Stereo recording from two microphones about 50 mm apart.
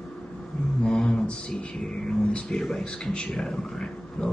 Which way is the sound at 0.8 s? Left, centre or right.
Centre.